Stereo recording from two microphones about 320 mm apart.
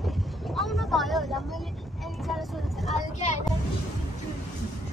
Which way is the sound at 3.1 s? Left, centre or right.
Left.